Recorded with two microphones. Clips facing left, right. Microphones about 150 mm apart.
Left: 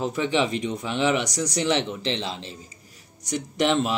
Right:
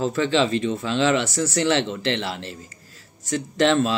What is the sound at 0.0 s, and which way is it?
Speech, 15° left (ahead or behind).